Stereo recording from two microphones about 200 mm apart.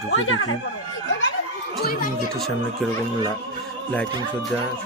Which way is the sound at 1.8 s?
45° left (ahead or behind).